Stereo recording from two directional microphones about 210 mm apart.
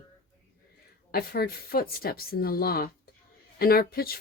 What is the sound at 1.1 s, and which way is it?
Speech, 45° left (ahead or behind).